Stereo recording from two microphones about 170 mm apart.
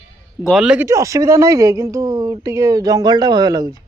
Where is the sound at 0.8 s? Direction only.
20° right (ahead or behind).